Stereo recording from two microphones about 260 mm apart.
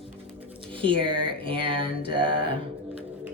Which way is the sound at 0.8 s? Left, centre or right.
Centre.